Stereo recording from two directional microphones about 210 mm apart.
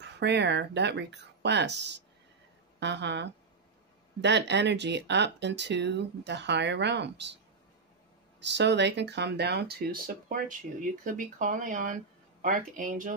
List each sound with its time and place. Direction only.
0.0 s speech: 55° right (ahead or behind)
8.4 s speech: 55° right (ahead or behind); by 13.1 s 40° right (ahead or behind)